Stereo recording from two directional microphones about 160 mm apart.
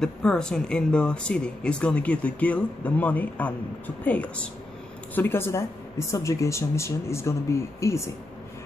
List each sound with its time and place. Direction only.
0.0 s speech: 5° left (ahead or behind)